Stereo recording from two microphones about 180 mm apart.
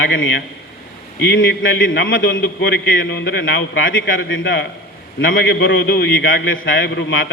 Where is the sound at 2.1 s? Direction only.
75° left (ahead or behind); by 4.6 s 90° left.